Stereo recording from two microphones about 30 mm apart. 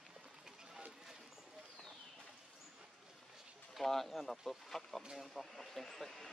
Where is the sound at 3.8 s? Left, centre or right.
Centre.